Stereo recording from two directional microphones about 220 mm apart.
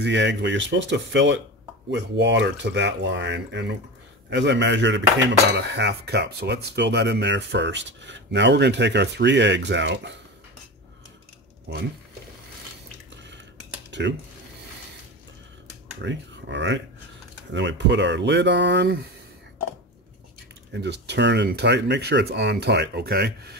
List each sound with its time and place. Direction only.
0.0 s speech: 55° right (ahead or behind)
11.7 s speech: 50° right (ahead or behind)
13.8 s cutlery: 55° right (ahead or behind)
16.0 s speech: 55° right (ahead or behind)
20.7 s speech: 50° right (ahead or behind)